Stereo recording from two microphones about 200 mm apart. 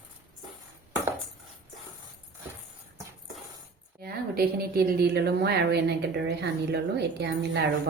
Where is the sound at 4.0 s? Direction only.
50° right (ahead or behind).